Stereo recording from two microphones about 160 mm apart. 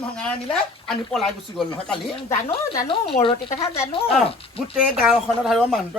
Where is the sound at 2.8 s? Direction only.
30° left (ahead or behind).